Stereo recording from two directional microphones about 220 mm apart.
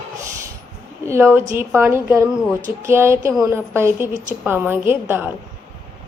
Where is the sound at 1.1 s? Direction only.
10° right (ahead or behind).